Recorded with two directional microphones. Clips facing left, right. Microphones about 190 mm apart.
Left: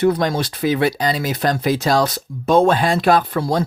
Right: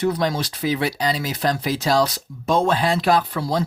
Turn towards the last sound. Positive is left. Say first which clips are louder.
# left 3 dB
turn(degrees=50)  # may be behind; listen again after turning